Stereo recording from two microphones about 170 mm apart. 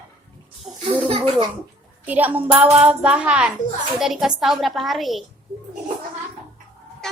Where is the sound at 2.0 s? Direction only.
10° right (ahead or behind).